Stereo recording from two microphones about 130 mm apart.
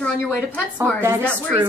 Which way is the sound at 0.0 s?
10° left (ahead or behind).